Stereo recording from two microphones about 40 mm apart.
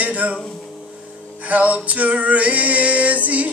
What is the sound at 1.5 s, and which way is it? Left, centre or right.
Music, right.